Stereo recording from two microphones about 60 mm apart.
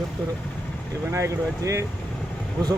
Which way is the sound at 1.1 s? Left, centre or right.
Right.